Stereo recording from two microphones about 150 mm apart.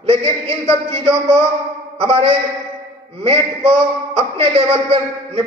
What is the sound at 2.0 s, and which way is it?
A man's voice, 40° right (ahead or behind).